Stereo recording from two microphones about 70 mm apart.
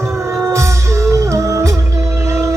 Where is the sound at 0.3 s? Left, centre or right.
Right.